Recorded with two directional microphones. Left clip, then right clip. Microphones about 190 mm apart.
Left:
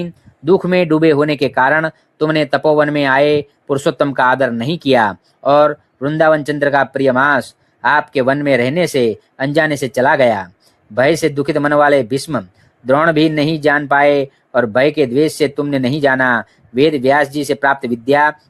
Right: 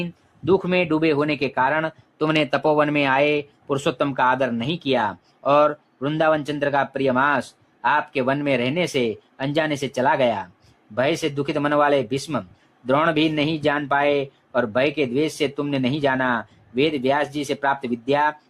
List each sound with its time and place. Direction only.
0.0 s speech: 30° left (ahead or behind)